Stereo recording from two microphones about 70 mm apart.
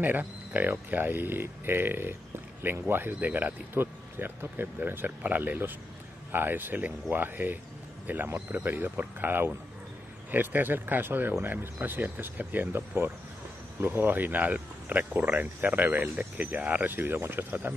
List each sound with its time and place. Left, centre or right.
0.0 s speech: right